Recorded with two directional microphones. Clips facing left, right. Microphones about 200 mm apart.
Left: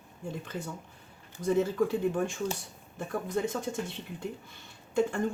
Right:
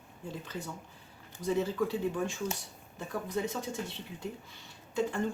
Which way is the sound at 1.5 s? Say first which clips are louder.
Left 4 dB; 50° left (ahead or behind).